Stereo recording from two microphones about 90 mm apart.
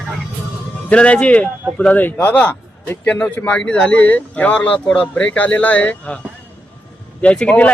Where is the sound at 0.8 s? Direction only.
15° left (ahead or behind).